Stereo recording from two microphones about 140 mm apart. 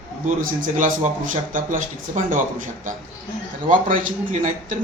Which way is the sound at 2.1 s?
70° right (ahead or behind).